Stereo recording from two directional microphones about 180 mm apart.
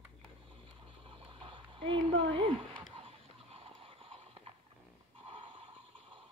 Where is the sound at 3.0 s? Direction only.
30° right (ahead or behind).